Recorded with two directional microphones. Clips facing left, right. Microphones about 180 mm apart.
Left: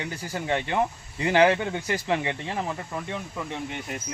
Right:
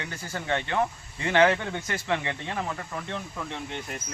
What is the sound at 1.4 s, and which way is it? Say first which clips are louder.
Speech: left 2 dB; 15° left (ahead or behind).